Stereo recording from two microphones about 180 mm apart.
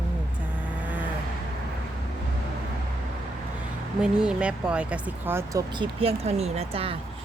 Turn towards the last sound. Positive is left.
turn(degrees=-30)  # may be behind; listen again after turning